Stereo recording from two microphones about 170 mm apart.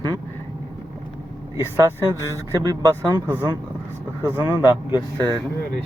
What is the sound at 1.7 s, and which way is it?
Speech, 15° right (ahead or behind).